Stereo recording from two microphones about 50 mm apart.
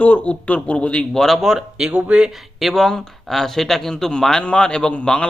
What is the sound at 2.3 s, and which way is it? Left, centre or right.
A man's voice, centre.